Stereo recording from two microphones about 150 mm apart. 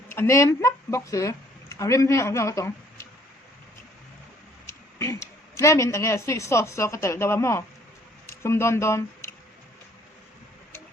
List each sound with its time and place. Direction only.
0.1 s speech: 20° left (ahead or behind)
4.6 s a sound: 20° left (ahead or behind)
5.5 s a woman's voice: 20° left (ahead or behind)